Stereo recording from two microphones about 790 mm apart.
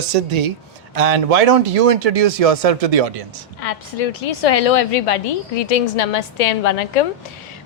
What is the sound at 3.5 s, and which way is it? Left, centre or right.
A woman's voice, left.